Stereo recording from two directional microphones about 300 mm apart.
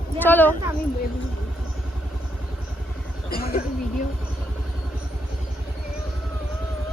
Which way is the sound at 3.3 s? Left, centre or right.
Left.